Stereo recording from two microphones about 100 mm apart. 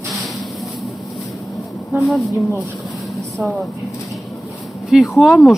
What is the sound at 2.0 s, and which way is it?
Speech, centre (ahead or behind).